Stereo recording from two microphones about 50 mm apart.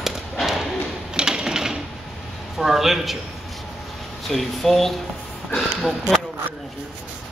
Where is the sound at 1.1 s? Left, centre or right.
Centre.